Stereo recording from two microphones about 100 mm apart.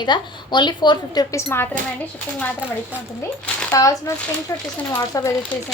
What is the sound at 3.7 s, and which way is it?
Speech, 35° left (ahead or behind).